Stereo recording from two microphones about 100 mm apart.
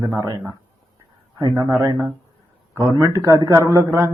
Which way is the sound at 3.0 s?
30° right (ahead or behind).